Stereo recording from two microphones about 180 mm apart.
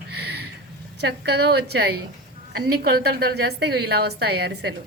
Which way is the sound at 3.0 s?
65° right (ahead or behind).